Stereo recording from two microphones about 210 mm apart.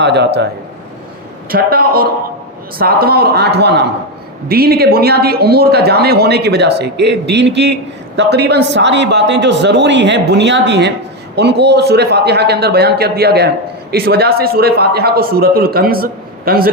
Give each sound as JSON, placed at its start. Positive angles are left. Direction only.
{"t": 0.0, "sound": "speech", "side_deg": -55}
{"t": 1.5, "sound": "a man's voice", "side_deg": -45}